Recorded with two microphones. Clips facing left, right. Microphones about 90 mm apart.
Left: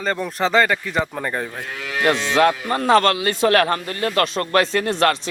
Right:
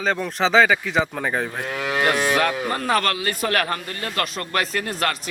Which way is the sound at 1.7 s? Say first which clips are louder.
Right 3 dB; 50° right (ahead or behind).